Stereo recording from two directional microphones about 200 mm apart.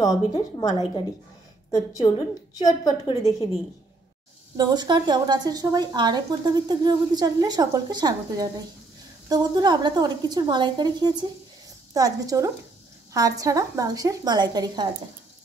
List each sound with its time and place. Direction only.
0.0 s a woman's voice: 15° left (ahead or behind)
4.6 s a woman's voice: 20° right (ahead or behind)